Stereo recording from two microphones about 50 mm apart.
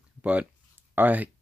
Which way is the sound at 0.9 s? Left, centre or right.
Right.